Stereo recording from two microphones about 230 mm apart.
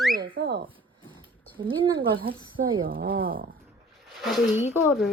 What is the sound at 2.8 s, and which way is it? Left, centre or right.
Speech, right.